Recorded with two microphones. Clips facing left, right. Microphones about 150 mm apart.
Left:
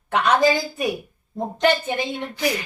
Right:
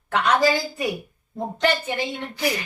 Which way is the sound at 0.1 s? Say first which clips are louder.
Left 2 dB; 20° left (ahead or behind).